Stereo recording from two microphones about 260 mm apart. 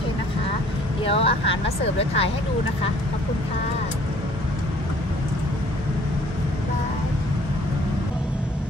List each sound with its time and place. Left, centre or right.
1.0 s speech: left